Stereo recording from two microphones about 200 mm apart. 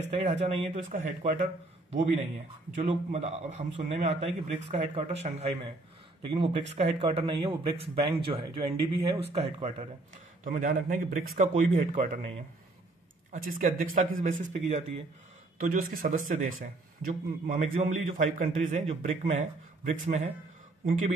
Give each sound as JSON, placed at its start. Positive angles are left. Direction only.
{"t": 0.1, "sound": "speech", "side_deg": -35}
{"t": 2.7, "sound": "a man's voice", "side_deg": -35}
{"t": 13.3, "sound": "speech", "side_deg": -40}